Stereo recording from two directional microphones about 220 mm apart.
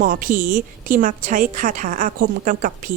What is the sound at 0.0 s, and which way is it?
A woman's voice, 40° right (ahead or behind).